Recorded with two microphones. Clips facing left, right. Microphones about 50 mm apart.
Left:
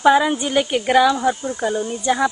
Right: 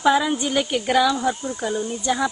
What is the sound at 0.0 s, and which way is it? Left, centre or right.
Speech, centre.